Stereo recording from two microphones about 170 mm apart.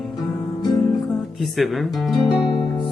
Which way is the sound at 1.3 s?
Centre (ahead or behind).